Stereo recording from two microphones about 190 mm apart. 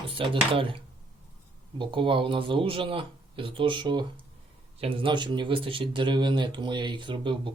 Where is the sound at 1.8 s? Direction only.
25° right (ahead or behind).